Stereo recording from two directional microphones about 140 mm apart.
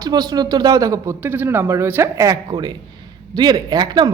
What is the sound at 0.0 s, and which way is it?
A woman's voice, 30° right (ahead or behind).